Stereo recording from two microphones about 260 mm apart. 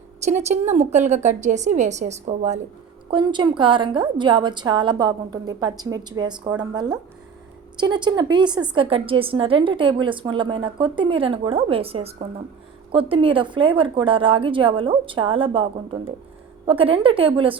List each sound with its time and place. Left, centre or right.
0.3 s a woman's voice: right